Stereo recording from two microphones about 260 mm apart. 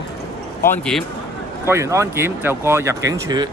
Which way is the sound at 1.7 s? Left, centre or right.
Centre.